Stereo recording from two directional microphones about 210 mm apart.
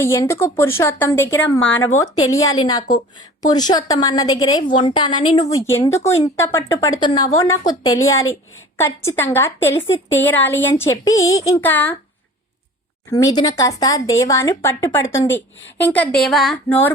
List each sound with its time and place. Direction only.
0.0 s a woman's voice: 15° left (ahead or behind)
13.1 s speech: 15° left (ahead or behind)